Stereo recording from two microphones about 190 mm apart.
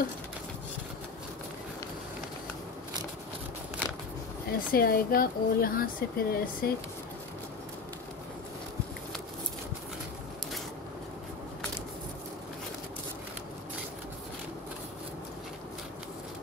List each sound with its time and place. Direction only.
4.5 s speech: 50° left (ahead or behind)